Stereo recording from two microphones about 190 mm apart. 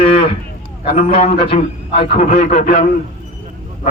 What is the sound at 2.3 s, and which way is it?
Speech, 45° left (ahead or behind).